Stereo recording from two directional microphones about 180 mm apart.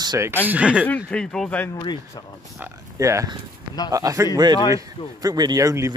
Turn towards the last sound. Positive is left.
turn(degrees=-15)  # may be behind; listen again after turning